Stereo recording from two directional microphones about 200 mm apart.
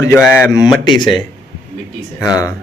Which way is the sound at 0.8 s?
25° left (ahead or behind).